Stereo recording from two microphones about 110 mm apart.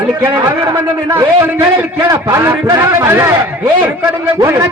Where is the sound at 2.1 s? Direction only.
25° right (ahead or behind).